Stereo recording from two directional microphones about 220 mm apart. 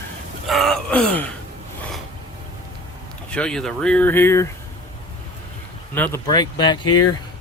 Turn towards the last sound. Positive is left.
turn(degrees=90)